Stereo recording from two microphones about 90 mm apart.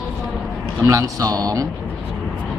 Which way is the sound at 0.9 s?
40° right (ahead or behind).